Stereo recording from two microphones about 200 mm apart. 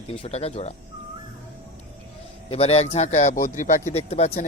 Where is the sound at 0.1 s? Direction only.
30° left (ahead or behind).